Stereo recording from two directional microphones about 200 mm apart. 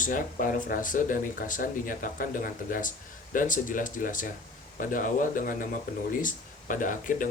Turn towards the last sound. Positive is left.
turn(degrees=40)  # may be behind; listen again after turning